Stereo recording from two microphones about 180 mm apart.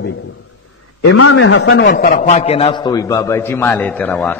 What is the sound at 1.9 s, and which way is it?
A man's voice, 50° left (ahead or behind).